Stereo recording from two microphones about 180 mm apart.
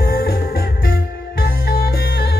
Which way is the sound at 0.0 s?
55° left (ahead or behind).